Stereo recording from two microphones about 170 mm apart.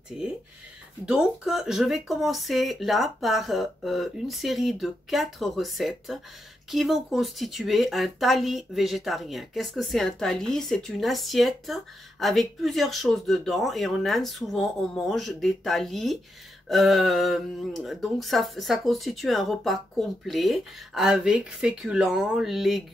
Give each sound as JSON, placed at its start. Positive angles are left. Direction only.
{"t": 0.1, "sound": "speech", "side_deg": 0}